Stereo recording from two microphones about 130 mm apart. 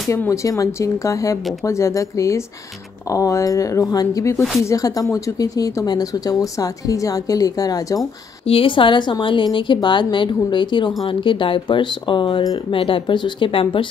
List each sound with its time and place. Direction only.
0.1 s speech: 20° left (ahead or behind)
8.5 s speech: 45° left (ahead or behind)